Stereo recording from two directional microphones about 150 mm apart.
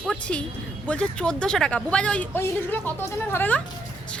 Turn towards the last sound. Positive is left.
turn(degrees=10)  # may be behind; listen again after turning